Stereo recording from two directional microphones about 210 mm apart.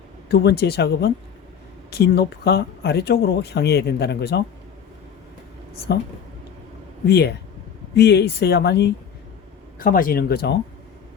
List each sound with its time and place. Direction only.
0.3 s speech: 50° left (ahead or behind)
7.1 s speech: 50° left (ahead or behind)
9.7 s speech: 40° left (ahead or behind)